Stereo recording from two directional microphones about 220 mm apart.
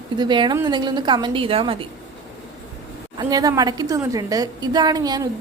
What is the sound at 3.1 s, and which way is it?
A woman's voice, 15° right (ahead or behind).